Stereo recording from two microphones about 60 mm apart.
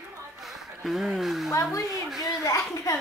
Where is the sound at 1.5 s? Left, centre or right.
Left.